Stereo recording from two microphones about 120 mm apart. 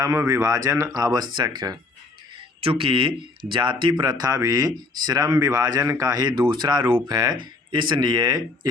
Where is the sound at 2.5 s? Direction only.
50° right (ahead or behind).